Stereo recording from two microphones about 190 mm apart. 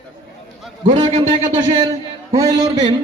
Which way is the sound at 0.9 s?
25° right (ahead or behind).